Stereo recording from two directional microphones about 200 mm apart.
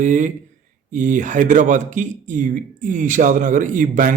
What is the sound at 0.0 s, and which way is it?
Speech, 40° right (ahead or behind).